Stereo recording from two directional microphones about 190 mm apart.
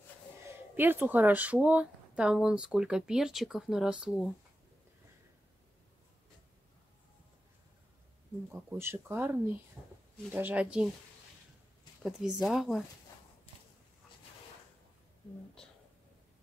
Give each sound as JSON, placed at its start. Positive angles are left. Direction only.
{"t": 0.7, "sound": "speech", "side_deg": -10}
{"t": 8.5, "sound": "speech", "side_deg": -10}
{"t": 9.8, "sound": "speech", "side_deg": 5}
{"t": 10.3, "sound": "speech", "side_deg": -10}
{"t": 12.0, "sound": "speech", "side_deg": 0}